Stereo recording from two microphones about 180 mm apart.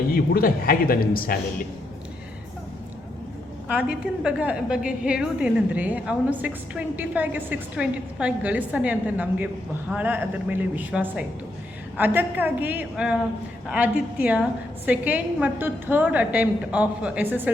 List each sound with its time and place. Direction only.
0.1 s speech: 55° left (ahead or behind)
3.7 s a woman's voice: 5° right (ahead or behind)